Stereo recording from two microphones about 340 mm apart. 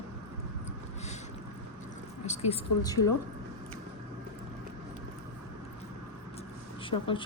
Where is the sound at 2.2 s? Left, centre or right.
Centre.